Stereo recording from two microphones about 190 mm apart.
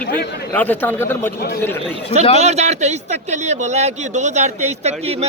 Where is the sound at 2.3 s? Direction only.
35° right (ahead or behind).